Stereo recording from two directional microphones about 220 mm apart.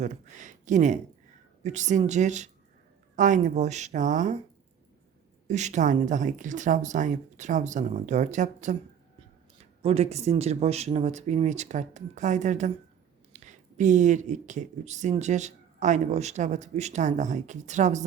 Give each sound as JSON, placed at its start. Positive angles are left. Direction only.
{"t": 0.0, "sound": "speech", "side_deg": -35}
{"t": 5.5, "sound": "speech", "side_deg": -30}
{"t": 9.8, "sound": "speech", "side_deg": -30}